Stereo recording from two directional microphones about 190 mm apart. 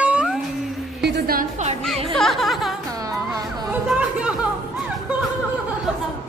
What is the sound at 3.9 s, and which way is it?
Music, 5° right (ahead or behind).